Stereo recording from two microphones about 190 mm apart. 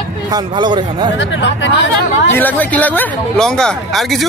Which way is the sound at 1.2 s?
75° left (ahead or behind).